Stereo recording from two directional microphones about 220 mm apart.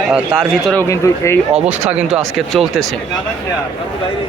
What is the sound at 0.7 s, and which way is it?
Speech, 10° left (ahead or behind).